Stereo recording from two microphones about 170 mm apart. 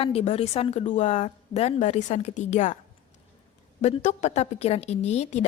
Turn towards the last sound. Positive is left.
turn(degrees=40)  # may be behind; listen again after turning